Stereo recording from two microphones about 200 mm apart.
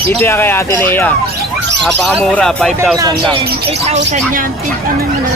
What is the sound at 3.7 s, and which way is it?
Speech, 30° right (ahead or behind).